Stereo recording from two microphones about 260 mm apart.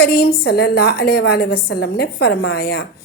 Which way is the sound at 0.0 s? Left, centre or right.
Left.